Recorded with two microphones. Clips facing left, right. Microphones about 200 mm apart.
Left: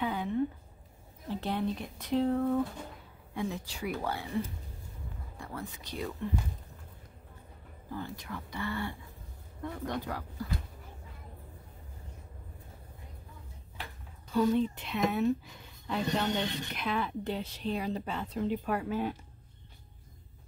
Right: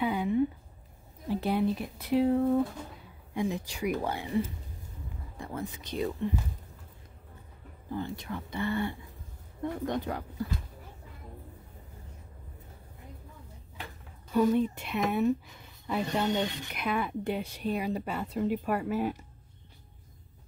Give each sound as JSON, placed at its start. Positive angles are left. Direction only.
{"t": 0.0, "sound": "a sound", "side_deg": -10}
{"t": 1.3, "sound": "speech", "side_deg": -10}
{"t": 5.4, "sound": "speech", "side_deg": -20}
{"t": 7.9, "sound": "speech", "side_deg": -25}
{"t": 14.3, "sound": "speech", "side_deg": -10}